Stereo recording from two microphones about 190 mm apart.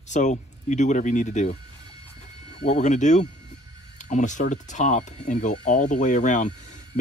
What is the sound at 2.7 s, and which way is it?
Speech, 40° left (ahead or behind).